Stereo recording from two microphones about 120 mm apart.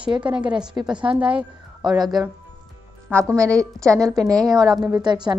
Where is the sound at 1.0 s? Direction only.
45° right (ahead or behind).